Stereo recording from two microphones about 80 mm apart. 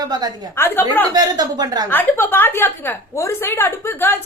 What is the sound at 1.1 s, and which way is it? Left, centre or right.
Speech, right.